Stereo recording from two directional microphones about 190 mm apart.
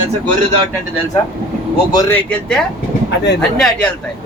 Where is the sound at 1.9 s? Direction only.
15° left (ahead or behind).